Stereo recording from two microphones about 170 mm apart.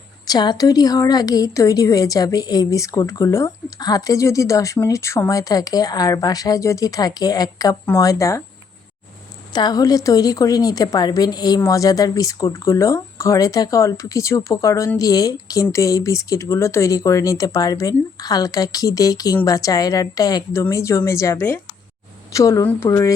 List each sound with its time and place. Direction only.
0.3 s a woman's voice: 25° left (ahead or behind)
9.5 s a woman's voice: 25° left (ahead or behind)